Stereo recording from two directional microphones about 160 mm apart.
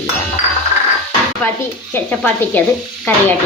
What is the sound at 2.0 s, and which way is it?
Speech, 10° left (ahead or behind).